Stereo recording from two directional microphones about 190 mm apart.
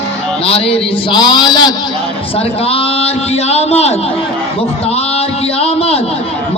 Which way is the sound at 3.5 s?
35° left (ahead or behind).